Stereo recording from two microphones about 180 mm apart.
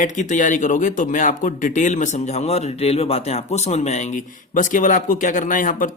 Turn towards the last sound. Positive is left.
turn(degrees=45)  # may be behind; listen again after turning